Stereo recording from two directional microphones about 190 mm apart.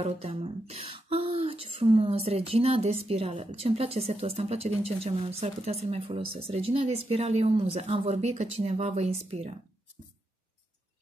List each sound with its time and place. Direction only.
0.0 s speech: 30° right (ahead or behind)